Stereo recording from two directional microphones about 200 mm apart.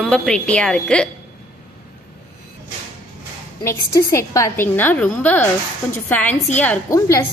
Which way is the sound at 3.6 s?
15° left (ahead or behind).